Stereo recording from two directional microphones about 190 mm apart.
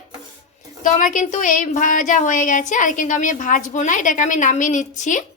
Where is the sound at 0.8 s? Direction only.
45° left (ahead or behind).